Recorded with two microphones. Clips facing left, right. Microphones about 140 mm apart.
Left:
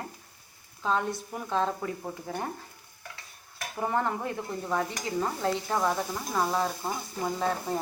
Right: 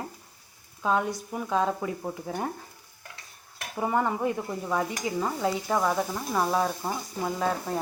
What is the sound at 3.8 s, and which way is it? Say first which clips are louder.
Speech: right 3 dB; 10° right (ahead or behind).